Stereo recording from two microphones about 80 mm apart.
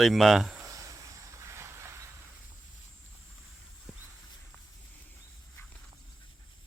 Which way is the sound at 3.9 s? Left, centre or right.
Centre.